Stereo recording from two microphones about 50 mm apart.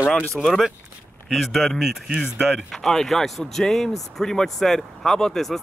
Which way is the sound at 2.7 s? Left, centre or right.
Centre.